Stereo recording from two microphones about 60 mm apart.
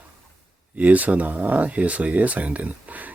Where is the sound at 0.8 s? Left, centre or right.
Right.